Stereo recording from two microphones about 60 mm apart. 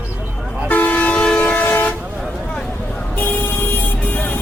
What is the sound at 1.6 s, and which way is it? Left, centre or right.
Vehicle, left.